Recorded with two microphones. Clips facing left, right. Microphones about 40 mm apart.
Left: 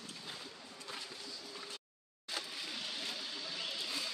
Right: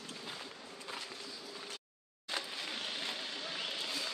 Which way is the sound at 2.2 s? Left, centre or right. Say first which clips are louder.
Right 3 dB; right.